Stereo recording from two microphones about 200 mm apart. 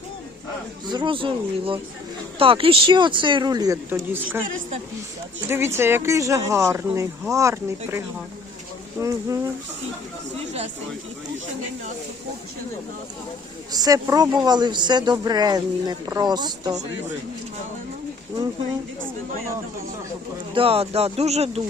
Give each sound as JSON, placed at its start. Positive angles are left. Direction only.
{"t": 0.9, "sound": "speech", "side_deg": -25}
{"t": 5.5, "sound": "speech", "side_deg": -10}
{"t": 13.7, "sound": "speech", "side_deg": -15}
{"t": 20.5, "sound": "speech", "side_deg": -30}